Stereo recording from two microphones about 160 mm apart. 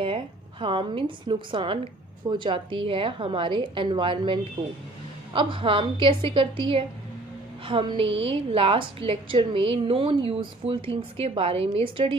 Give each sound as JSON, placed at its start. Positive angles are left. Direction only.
{"t": 0.0, "sound": "a woman's voice", "side_deg": -30}